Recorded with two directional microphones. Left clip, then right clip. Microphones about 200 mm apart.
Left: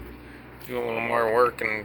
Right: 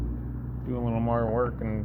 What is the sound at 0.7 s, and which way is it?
Speech, 40° left (ahead or behind).